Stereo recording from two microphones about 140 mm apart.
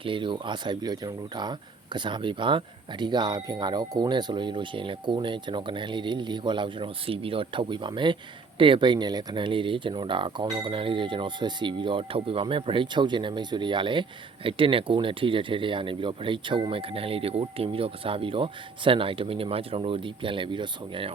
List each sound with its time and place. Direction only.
0.0 s speech: 35° right (ahead or behind)